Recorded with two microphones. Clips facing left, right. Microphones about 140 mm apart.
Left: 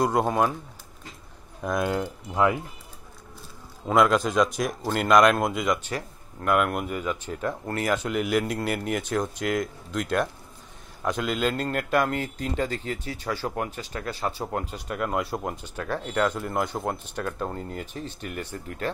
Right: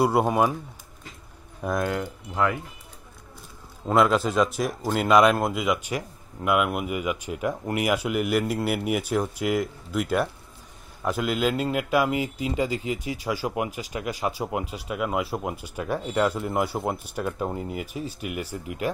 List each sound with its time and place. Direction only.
0.0 s a man's voice: 10° right (ahead or behind)
1.8 s speech: 15° left (ahead or behind)
3.8 s a man's voice: 5° right (ahead or behind)